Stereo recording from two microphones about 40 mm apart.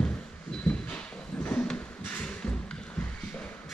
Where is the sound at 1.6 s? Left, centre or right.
Left.